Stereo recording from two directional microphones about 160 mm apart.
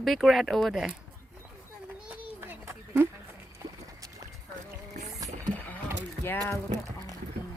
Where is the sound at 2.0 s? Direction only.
10° right (ahead or behind).